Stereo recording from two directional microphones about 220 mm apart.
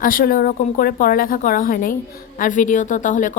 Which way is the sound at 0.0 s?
40° left (ahead or behind).